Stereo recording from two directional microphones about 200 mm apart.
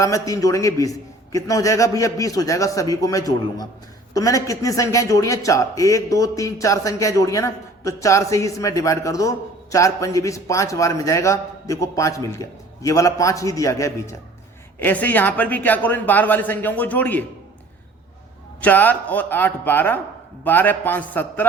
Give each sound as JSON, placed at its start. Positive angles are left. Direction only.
{"t": 0.0, "sound": "a man's voice", "side_deg": 15}
{"t": 18.6, "sound": "a man's voice", "side_deg": 10}